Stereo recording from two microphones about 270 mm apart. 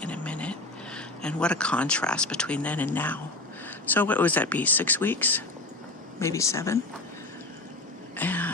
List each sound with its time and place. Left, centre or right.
0.0 s a sound: centre
0.9 s speech: centre
8.1 s throat clearing: centre